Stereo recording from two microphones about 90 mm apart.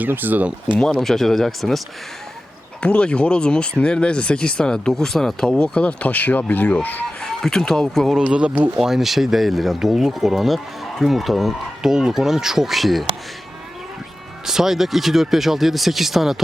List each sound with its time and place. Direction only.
0.0 s speech: 20° right (ahead or behind)
0.8 s speech: 5° left (ahead or behind)
2.8 s speech: 10° left (ahead or behind)
7.2 s speech: 5° left (ahead or behind)
8.2 s speech: 10° right (ahead or behind)
8.8 s speech: 5° right (ahead or behind)
14.4 s speech: 5° right (ahead or behind)